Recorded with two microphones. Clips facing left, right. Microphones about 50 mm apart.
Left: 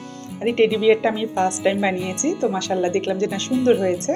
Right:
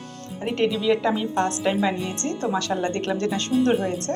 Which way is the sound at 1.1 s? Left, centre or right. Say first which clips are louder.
Left 2 dB; centre.